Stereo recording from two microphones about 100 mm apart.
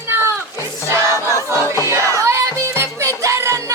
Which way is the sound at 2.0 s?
30° right (ahead or behind).